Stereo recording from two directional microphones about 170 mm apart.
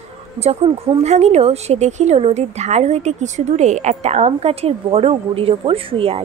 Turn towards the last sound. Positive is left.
turn(degrees=-35)  # may be behind; listen again after turning